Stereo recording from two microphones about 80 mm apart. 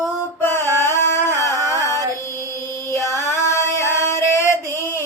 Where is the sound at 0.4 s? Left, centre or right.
Left.